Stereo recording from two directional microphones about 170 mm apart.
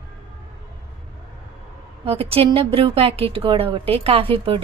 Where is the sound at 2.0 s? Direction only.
35° right (ahead or behind).